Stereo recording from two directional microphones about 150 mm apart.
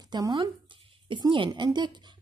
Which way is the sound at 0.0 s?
25° right (ahead or behind).